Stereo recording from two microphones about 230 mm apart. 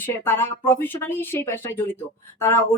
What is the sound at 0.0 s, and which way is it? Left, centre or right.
A woman's voice, centre.